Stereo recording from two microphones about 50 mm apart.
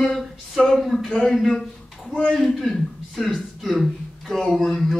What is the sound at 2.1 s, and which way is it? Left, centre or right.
Speech, left.